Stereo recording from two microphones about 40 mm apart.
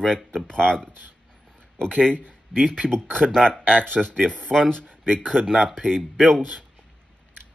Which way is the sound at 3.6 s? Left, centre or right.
Right.